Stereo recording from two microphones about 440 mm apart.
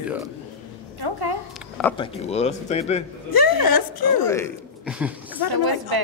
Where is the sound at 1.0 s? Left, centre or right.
Right.